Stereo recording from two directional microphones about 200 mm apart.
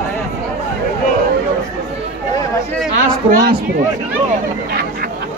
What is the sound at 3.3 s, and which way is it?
Speech, 50° right (ahead or behind).